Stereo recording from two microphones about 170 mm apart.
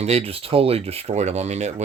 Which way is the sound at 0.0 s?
35° right (ahead or behind).